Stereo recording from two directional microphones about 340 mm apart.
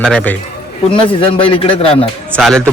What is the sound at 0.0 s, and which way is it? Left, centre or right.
Speech, centre.